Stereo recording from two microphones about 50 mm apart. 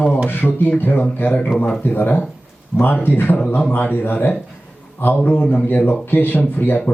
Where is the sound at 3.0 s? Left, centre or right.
Left.